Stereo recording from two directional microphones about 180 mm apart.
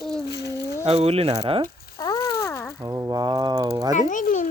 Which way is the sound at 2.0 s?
20° left (ahead or behind).